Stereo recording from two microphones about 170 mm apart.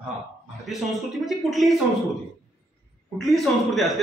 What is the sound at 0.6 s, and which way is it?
A man's voice, centre (ahead or behind).